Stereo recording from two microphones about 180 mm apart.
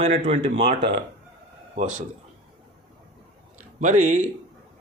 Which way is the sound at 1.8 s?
45° right (ahead or behind).